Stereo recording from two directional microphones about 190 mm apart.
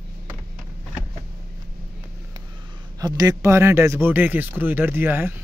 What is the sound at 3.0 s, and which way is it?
A man's voice, 20° right (ahead or behind).